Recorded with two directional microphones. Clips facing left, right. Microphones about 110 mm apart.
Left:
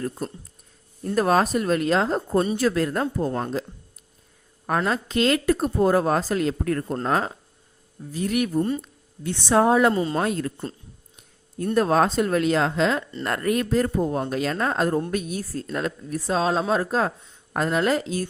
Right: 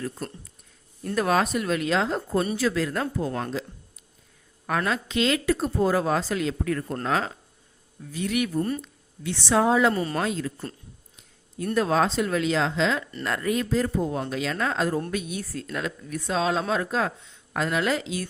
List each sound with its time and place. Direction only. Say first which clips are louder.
1.1 s speech: left 3 dB; 40° left (ahead or behind)
4.6 s a woman's voice: left 3 dB; 30° left (ahead or behind)
4.9 s speech: left 3 dB; 45° left (ahead or behind)
7.1 s speech: left 2 dB; 20° left (ahead or behind)
8.1 s speech: left 2 dB; 45° left (ahead or behind)
8.5 s speech: left 3 dB; 20° left (ahead or behind)
8.8 s a woman's voice: left 2 dB; 45° left (ahead or behind)
9.9 s speech: left 3 dB; 25° left (ahead or behind)
10.2 s speech: left 3 dB; 50° left (ahead or behind)
11.7 s speech: left 3 dB; 45° left (ahead or behind)